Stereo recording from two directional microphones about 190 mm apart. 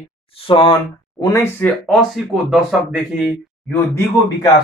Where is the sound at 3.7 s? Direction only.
15° left (ahead or behind).